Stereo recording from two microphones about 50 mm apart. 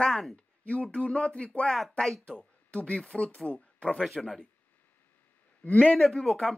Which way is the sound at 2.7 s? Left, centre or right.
Left.